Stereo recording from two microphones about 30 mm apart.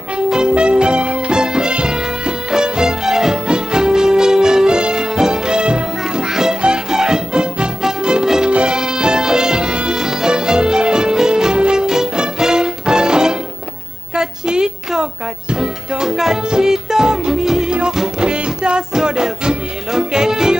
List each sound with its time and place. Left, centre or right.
0.5 s music: right
1.4 s music: right
6.9 s music: right
8.5 s music: right
8.7 s music: right
14.1 s a sound: right
15.5 s music: right
18.2 s music: right